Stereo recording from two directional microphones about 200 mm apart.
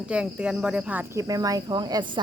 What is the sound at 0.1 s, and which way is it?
Speech, 5° right (ahead or behind).